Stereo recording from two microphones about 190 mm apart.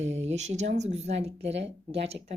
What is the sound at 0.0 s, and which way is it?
Speech, 35° right (ahead or behind).